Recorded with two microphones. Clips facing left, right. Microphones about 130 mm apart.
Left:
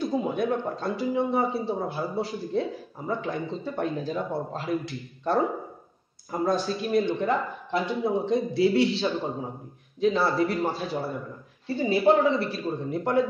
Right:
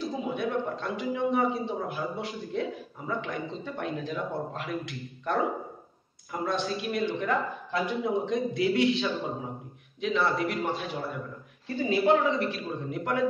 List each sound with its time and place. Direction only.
0.0 s a man's voice: 40° left (ahead or behind)
6.4 s a man's voice: 35° left (ahead or behind)